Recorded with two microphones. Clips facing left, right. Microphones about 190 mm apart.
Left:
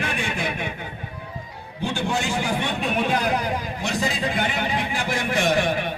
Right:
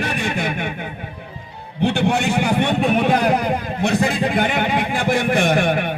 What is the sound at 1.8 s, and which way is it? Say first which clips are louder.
A man's voice: right 7 dB; 65° right (ahead or behind).